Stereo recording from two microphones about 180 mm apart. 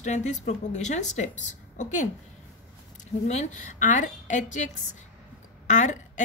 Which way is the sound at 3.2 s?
40° left (ahead or behind).